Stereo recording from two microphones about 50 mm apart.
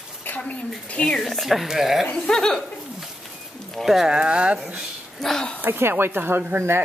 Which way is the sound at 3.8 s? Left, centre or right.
Centre.